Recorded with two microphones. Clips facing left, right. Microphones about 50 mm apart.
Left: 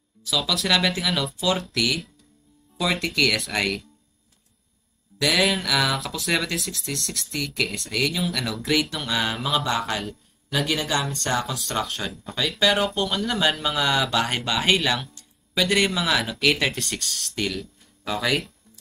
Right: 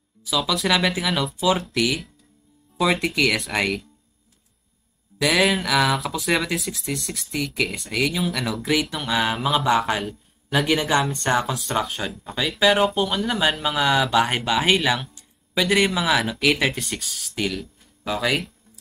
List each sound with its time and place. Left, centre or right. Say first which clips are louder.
0.2 s speech: right 2 dB; centre
5.2 s a man's voice: right 2 dB; centre
10.7 s speech: right 6 dB; right
11.5 s speech: right 3 dB; centre